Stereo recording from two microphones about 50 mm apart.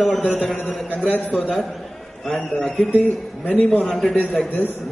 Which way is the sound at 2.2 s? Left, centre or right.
Centre.